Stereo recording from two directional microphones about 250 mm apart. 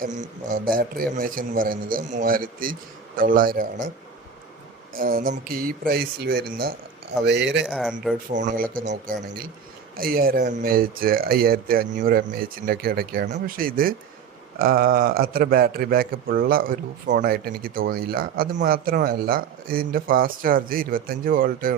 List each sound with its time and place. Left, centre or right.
0.0 s a man's voice: right
4.9 s a man's voice: right
7.7 s speech: centre
8.3 s a man's voice: right